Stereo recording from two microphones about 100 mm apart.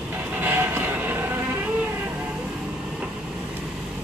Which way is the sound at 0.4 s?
20° right (ahead or behind).